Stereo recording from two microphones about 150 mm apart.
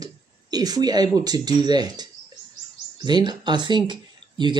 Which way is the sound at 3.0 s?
30° right (ahead or behind).